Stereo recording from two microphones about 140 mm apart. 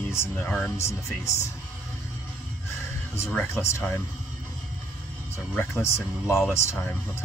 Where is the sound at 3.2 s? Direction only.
20° left (ahead or behind).